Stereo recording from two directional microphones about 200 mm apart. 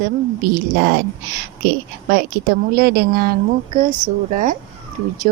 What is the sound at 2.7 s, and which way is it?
Speech, 50° right (ahead or behind).